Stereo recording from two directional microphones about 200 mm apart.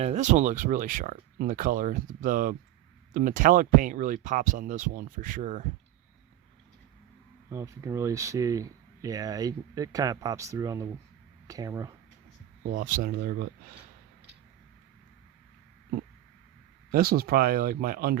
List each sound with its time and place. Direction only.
0.0 s speech: 35° right (ahead or behind)
7.5 s speech: 15° right (ahead or behind)
12.7 s speech: 45° right (ahead or behind)
16.9 s speech: 50° right (ahead or behind)